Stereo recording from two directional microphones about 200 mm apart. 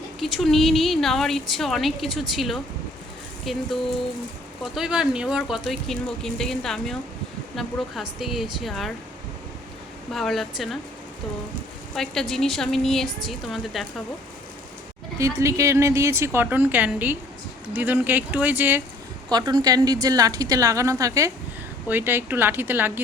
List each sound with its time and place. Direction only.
0.2 s speech: centre (ahead or behind)
10.1 s speech: centre (ahead or behind)
11.9 s speech: centre (ahead or behind)
15.2 s a woman's voice: 15° right (ahead or behind)
19.3 s a woman's voice: 20° right (ahead or behind)